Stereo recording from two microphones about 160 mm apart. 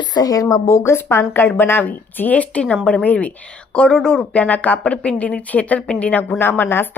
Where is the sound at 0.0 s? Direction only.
25° left (ahead or behind).